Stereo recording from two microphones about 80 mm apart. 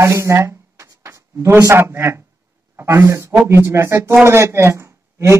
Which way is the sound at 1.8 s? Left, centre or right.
Right.